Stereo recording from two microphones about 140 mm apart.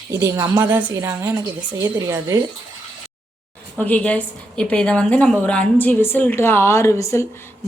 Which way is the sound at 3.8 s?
10° left (ahead or behind).